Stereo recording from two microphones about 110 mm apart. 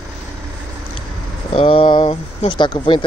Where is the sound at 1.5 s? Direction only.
55° left (ahead or behind).